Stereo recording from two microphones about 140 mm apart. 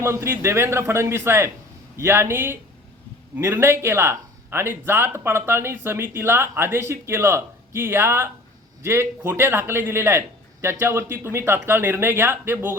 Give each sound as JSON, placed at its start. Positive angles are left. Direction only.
{"t": 0.0, "sound": "a man's voice", "side_deg": -20}